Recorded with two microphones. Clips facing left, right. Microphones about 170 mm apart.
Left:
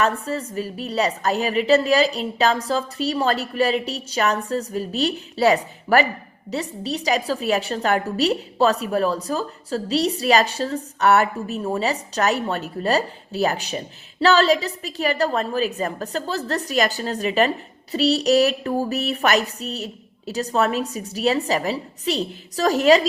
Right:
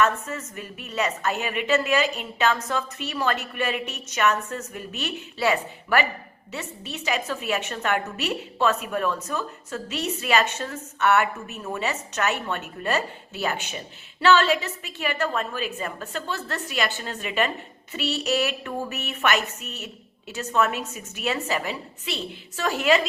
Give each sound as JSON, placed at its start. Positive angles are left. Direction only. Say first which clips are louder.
{"t": 0.0, "sound": "a woman's voice", "louder": "left 2 dB", "side_deg": 35}